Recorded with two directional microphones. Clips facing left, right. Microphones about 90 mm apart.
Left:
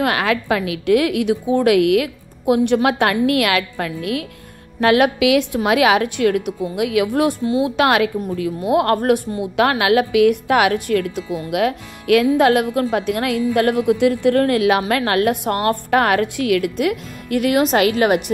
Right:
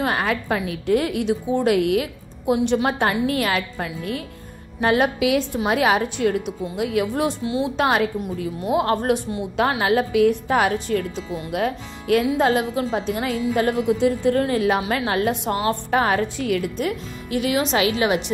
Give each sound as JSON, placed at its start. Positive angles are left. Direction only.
{"t": 0.0, "sound": "a woman's voice", "side_deg": 90}
{"t": 8.7, "sound": "a woman's voice", "side_deg": 60}